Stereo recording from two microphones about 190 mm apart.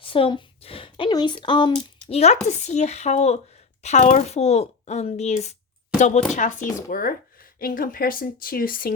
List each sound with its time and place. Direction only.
0.0 s speech: 25° left (ahead or behind); by 9.0 s 50° left (ahead or behind)